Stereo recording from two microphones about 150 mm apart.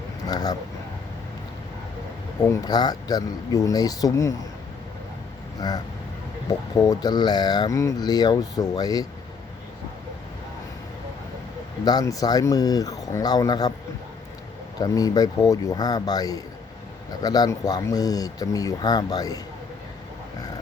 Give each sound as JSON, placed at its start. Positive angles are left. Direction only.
{"t": 0.3, "sound": "speech", "side_deg": 25}
{"t": 2.5, "sound": "speech", "side_deg": 25}
{"t": 5.5, "sound": "speech", "side_deg": 25}
{"t": 11.9, "sound": "speech", "side_deg": 25}
{"t": 14.8, "sound": "speech", "side_deg": 25}